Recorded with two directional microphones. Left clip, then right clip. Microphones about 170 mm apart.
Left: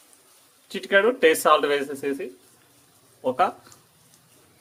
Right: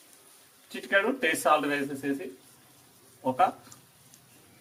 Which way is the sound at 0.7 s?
60° left (ahead or behind).